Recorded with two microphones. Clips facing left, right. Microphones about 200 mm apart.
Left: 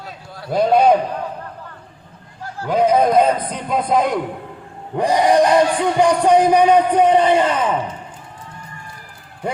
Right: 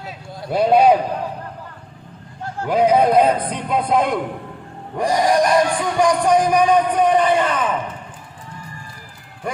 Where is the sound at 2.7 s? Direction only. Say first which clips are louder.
Even; centre (ahead or behind).